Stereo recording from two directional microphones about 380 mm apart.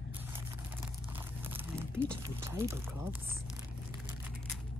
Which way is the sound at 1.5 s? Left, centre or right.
Centre.